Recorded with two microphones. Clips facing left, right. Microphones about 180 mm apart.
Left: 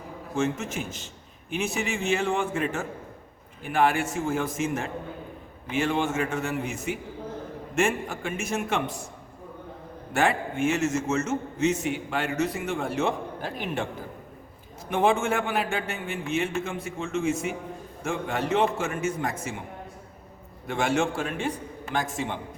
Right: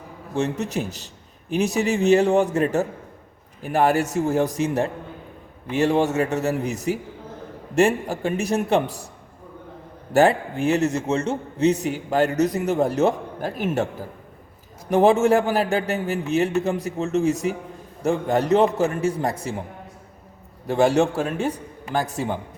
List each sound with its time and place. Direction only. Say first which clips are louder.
0.3 s a man's voice: right 4 dB; 35° right (ahead or behind)
10.1 s a man's voice: right 7 dB; 35° right (ahead or behind)
14.8 s a man's voice: right 7 dB; 40° right (ahead or behind)
20.7 s a man's voice: right 7 dB; 35° right (ahead or behind)